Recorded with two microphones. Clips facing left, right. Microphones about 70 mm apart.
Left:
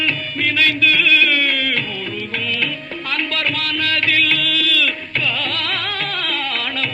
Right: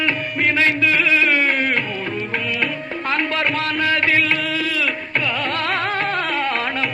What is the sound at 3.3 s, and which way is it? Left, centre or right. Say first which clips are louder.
Music: right 2 dB; right.